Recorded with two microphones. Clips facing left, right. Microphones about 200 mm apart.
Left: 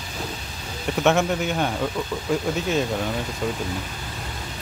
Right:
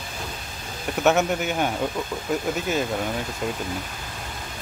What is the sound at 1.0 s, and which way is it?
Speech, 5° right (ahead or behind).